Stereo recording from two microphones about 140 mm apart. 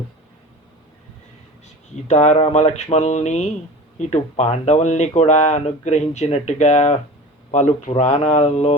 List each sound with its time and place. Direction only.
2.0 s speech: 55° left (ahead or behind)